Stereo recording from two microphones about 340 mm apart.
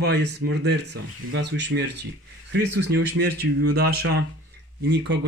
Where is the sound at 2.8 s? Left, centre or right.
Right.